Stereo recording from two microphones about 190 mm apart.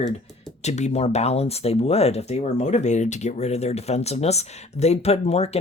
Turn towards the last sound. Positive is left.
turn(degrees=35)  # may be behind; listen again after turning